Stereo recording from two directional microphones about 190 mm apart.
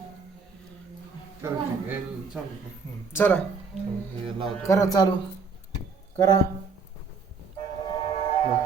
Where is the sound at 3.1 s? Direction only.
10° left (ahead or behind).